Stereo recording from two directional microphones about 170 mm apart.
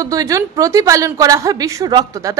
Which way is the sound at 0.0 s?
20° right (ahead or behind).